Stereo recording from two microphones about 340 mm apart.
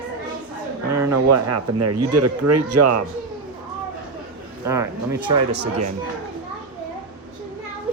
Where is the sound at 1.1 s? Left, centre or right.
Right.